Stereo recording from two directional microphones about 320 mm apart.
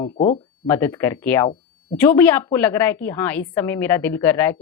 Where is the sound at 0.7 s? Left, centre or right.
Centre.